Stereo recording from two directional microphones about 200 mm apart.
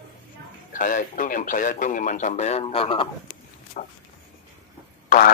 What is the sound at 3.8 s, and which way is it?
Speech, 40° left (ahead or behind).